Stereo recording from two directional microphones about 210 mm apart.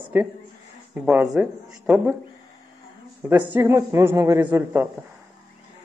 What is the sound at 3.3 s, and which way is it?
Speech, 15° right (ahead or behind).